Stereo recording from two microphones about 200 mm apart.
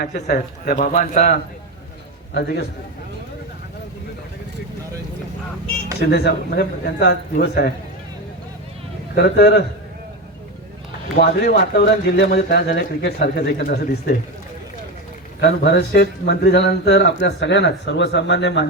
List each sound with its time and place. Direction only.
0.0 s speech: 55° left (ahead or behind); by 1.3 s 40° left (ahead or behind)
2.3 s speech: 55° left (ahead or behind)
6.0 s speech: 55° left (ahead or behind)
9.1 s speech: 55° left (ahead or behind)
11.2 s speech: 55° left (ahead or behind)
15.4 s speech: 55° left (ahead or behind)